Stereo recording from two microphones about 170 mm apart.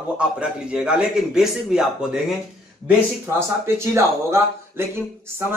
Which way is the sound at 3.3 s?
15° right (ahead or behind).